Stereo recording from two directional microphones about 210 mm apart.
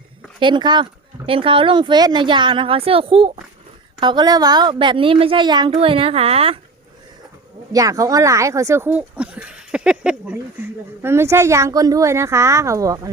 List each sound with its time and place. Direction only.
0.3 s speech: 20° right (ahead or behind)
7.7 s speech: 15° right (ahead or behind)